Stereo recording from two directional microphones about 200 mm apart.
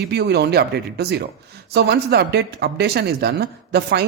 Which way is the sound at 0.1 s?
55° right (ahead or behind).